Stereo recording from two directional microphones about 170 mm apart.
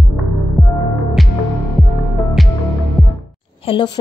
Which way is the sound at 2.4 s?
Centre (ahead or behind).